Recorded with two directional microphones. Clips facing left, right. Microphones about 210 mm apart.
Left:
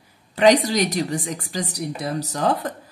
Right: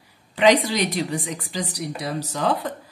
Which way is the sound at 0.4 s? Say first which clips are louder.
Left 2 dB; 45° left (ahead or behind).